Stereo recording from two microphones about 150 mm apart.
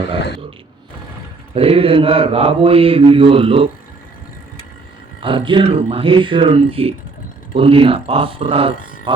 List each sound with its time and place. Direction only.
1.5 s speech: 40° right (ahead or behind)
5.2 s speech: 35° right (ahead or behind)